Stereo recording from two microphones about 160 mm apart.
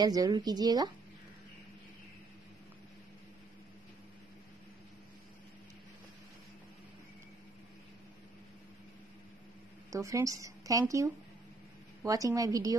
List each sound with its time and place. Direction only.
0.0 s a woman's voice: 25° right (ahead or behind)
9.8 s a woman's voice: 20° right (ahead or behind)